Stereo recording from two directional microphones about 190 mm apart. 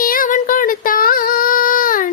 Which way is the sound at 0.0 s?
50° left (ahead or behind).